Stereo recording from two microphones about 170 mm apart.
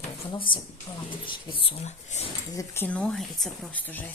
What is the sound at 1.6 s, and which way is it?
Speech, 40° left (ahead or behind).